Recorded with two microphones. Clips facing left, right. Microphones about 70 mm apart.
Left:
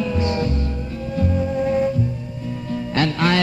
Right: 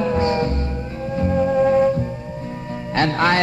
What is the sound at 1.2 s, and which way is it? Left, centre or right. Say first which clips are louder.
Music: right 5 dB; right.